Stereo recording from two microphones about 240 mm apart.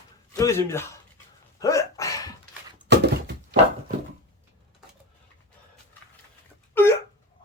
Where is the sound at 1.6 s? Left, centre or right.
Centre.